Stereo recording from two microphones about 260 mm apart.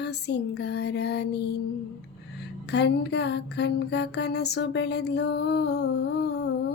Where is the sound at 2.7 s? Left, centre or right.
Left.